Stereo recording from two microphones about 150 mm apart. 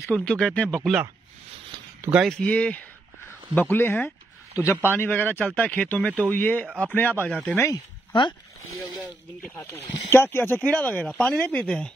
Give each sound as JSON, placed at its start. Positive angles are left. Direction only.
{"t": 0.1, "sound": "speech", "side_deg": 5}
{"t": 2.2, "sound": "speech", "side_deg": 5}
{"t": 8.1, "sound": "speech", "side_deg": 30}
{"t": 9.7, "sound": "speech", "side_deg": 20}